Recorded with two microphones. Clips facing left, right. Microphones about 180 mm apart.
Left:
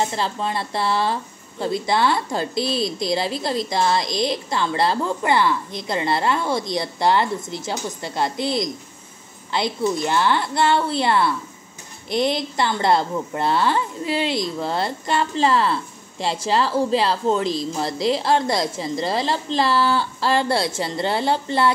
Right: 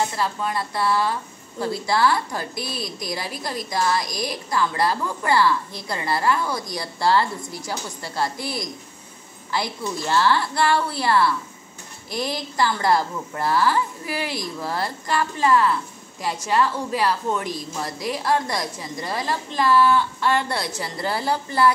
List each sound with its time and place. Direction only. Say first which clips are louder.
0.0 s a woman's voice: left 1 dB; 25° left (ahead or behind)